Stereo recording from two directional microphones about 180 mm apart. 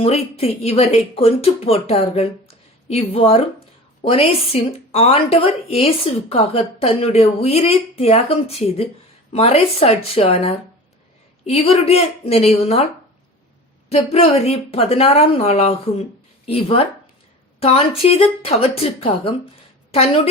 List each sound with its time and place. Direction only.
0.0 s speech: 35° left (ahead or behind)
13.9 s speech: 35° left (ahead or behind)